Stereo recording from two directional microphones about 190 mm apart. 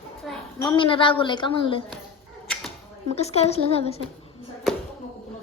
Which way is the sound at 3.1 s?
35° left (ahead or behind).